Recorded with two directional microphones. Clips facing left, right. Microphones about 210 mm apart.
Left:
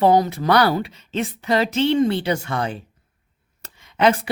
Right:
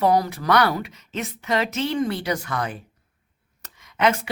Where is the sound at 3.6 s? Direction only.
30° left (ahead or behind).